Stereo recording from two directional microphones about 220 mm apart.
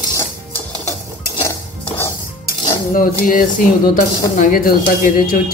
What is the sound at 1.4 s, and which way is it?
Cutlery, 10° left (ahead or behind).